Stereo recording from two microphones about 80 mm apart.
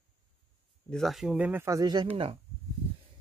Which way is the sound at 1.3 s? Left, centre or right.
Right.